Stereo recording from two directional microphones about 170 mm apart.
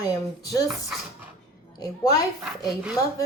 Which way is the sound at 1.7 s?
20° left (ahead or behind).